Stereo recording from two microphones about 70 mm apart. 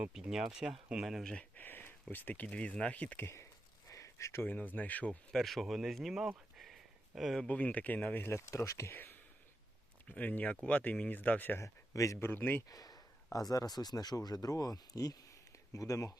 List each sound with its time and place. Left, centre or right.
0.1 s speech: centre
1.2 s speech: centre
3.2 s speech: left
3.8 s a sound: left
4.4 s speech: left
5.3 s speech: centre
7.4 s speech: left
8.2 s speech: left
8.9 s speech: left
10.1 s speech: left
11.6 s speech: left
12.1 s speech: left
12.6 s a sound: left
13.5 s speech: left